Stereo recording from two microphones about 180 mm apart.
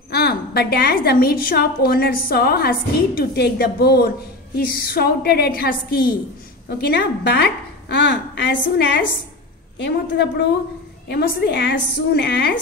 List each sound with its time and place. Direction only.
0.1 s a woman's voice: 60° left (ahead or behind)
6.8 s a woman's voice: 70° left (ahead or behind)